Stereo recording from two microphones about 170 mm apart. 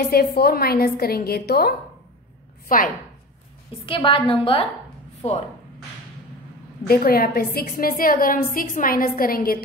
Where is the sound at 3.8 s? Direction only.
30° left (ahead or behind).